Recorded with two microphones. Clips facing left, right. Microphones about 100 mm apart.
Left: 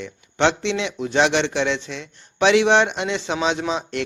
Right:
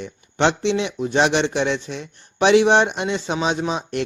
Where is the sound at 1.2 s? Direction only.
45° right (ahead or behind).